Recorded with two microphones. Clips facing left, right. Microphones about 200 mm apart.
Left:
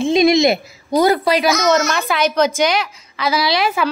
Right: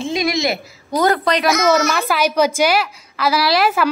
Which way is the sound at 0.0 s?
20° left (ahead or behind).